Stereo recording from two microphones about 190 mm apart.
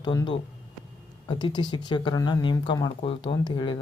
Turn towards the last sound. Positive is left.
turn(degrees=25)  # may be behind; listen again after turning